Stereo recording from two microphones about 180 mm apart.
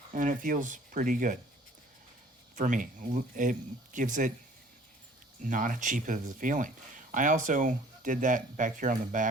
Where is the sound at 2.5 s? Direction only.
45° right (ahead or behind).